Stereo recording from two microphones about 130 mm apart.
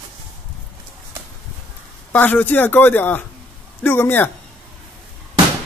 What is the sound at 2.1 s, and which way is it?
Speech, 15° left (ahead or behind).